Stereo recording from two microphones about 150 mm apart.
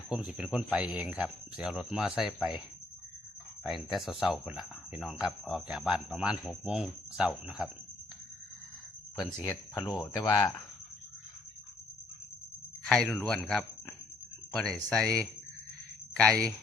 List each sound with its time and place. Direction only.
0.1 s speech: 5° right (ahead or behind)
3.6 s speech: centre (ahead or behind)
9.4 s speech: 25° left (ahead or behind)
12.8 s speech: 5° left (ahead or behind)